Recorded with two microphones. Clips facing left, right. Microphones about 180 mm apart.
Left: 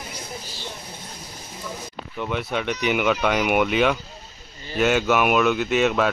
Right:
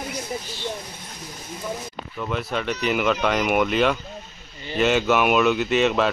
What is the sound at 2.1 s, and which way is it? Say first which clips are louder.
Speech: left 1 dB; centre (ahead or behind).